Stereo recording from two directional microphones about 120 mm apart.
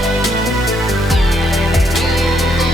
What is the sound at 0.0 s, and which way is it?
Music, centre (ahead or behind).